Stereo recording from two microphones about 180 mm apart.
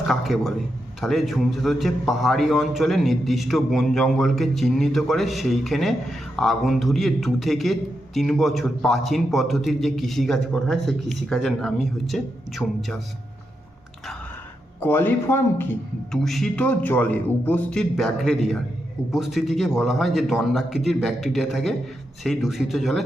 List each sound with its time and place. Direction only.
0.1 s speech: centre (ahead or behind)
14.8 s a man's voice: 10° left (ahead or behind)
16.2 s speech: centre (ahead or behind)